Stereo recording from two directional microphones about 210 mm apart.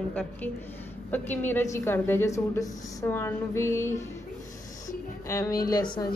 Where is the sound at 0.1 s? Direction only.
5° left (ahead or behind).